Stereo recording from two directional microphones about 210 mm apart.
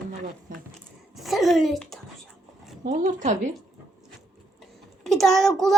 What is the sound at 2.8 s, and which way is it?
Speech, 35° right (ahead or behind).